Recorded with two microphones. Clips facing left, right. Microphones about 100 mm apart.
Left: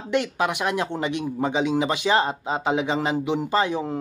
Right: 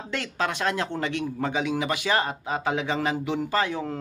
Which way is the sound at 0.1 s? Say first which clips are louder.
Left 6 dB; 15° left (ahead or behind).